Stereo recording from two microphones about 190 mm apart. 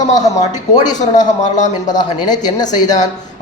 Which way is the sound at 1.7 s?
20° left (ahead or behind).